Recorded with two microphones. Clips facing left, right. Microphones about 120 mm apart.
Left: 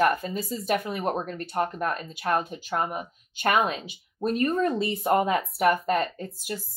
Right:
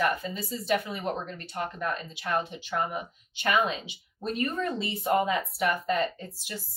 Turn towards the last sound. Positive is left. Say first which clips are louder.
# left 5 dB
turn(degrees=45)  # may be behind; listen again after turning